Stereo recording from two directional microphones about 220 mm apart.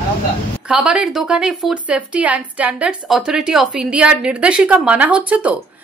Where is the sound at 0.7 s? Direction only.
5° right (ahead or behind).